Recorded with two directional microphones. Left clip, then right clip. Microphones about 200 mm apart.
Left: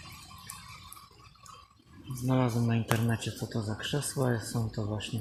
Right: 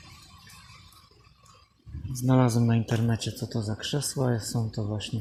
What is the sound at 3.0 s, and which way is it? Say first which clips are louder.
Speech: right 3 dB; 20° right (ahead or behind).